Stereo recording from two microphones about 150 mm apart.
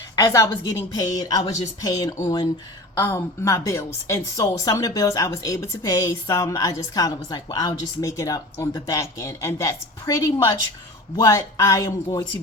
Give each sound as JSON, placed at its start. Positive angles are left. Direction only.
{"t": 0.2, "sound": "a woman's voice", "side_deg": 20}